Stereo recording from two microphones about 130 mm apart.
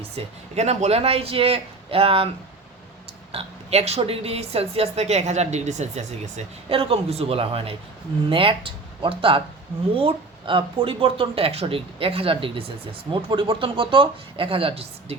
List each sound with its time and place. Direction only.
0.2 s speech: 60° right (ahead or behind)
3.3 s speech: 55° right (ahead or behind)
6.7 s speech: 45° right (ahead or behind)